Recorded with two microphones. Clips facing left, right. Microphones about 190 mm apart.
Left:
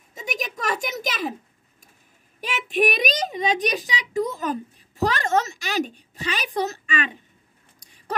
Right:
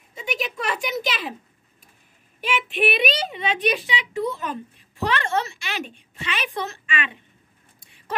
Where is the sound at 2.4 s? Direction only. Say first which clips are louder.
Left 1 dB; 40° left (ahead or behind).